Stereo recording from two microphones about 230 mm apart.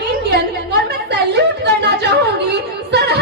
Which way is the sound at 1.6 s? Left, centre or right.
Right.